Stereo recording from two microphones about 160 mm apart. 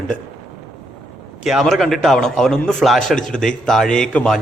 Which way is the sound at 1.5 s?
Centre (ahead or behind).